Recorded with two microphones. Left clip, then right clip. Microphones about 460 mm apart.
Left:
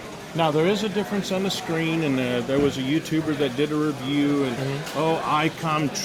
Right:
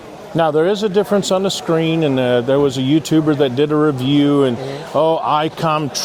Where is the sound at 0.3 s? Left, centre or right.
Right.